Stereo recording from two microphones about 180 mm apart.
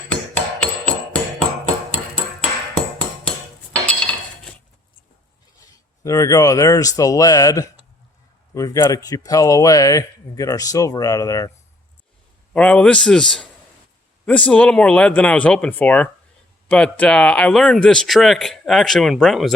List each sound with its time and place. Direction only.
0.1 s music: 5° left (ahead or behind)
3.7 s dishes: 5° left (ahead or behind)
6.0 s speech: 20° left (ahead or behind)
12.5 s speech: 5° left (ahead or behind)